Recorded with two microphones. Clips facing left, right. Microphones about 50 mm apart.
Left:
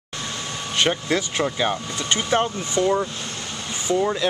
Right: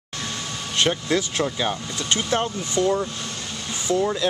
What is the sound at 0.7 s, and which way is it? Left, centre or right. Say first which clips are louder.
Speech: even; centre.